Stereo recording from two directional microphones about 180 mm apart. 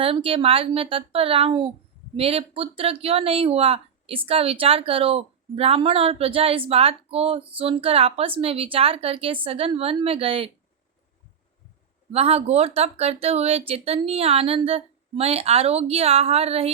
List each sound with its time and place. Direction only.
0.0 s speech: 30° right (ahead or behind)
12.1 s speech: 35° right (ahead or behind)